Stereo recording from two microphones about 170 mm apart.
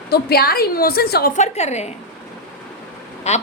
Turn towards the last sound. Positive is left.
turn(degrees=40)  # may be behind; listen again after turning